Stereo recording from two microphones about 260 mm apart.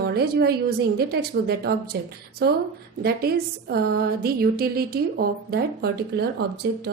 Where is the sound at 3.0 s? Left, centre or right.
Right.